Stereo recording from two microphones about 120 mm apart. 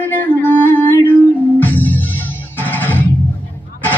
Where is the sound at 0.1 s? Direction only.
15° left (ahead or behind).